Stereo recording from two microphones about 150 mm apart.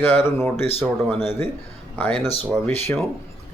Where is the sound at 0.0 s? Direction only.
15° left (ahead or behind).